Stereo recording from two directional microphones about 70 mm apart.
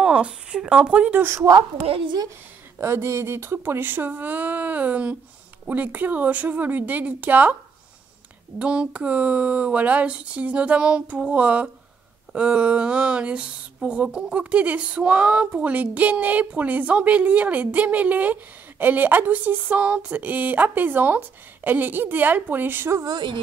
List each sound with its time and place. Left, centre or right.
0.0 s a sound: centre
2.8 s speech: right
8.5 s speech: centre
12.3 s a sound: centre
13.8 s speech: centre; by 22.9 s right
23.0 s speech: right